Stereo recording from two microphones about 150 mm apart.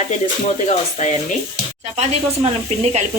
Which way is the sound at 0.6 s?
55° left (ahead or behind).